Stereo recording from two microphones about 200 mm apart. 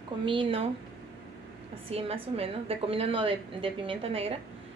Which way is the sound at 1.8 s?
30° right (ahead or behind).